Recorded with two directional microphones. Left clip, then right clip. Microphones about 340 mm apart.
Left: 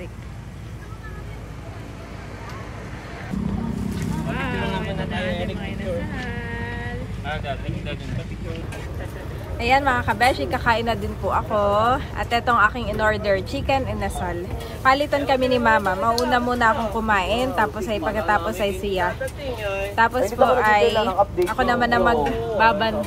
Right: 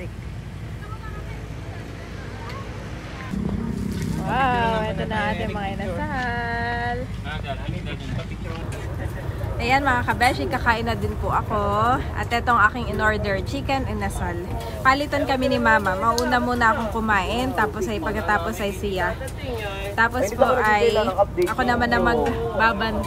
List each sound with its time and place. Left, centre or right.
3.9 s boat: centre
4.3 s vehicle: right
5.3 s vehicle: centre
6.3 s a sound: right
7.2 s a woman's voice: centre
9.6 s a woman's voice: centre